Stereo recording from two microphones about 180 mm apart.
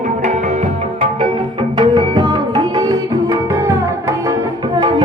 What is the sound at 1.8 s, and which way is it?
Music, 25° right (ahead or behind).